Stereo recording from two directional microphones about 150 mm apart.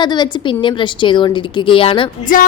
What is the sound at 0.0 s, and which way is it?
A woman's voice, 30° left (ahead or behind).